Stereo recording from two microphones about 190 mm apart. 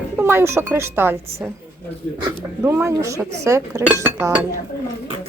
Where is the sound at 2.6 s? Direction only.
15° right (ahead or behind).